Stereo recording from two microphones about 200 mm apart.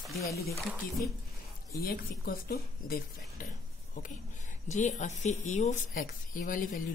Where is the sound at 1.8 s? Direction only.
50° left (ahead or behind).